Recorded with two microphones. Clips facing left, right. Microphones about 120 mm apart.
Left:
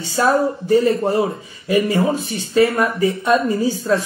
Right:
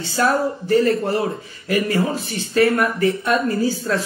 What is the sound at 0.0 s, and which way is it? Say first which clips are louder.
A man's voice: left 2 dB; 25° left (ahead or behind).